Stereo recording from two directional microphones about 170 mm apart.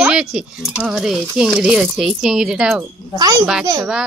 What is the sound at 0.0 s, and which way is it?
Speech, 5° right (ahead or behind).